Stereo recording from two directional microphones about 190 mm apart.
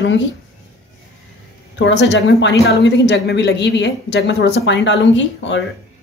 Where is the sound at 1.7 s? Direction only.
70° left (ahead or behind).